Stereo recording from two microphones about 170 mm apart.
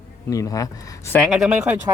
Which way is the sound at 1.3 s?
5° right (ahead or behind).